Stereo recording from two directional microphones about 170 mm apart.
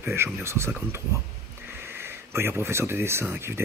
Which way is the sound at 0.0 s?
15° right (ahead or behind).